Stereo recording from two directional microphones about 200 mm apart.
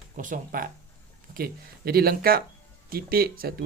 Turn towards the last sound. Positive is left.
turn(degrees=-50)  # may be behind; listen again after turning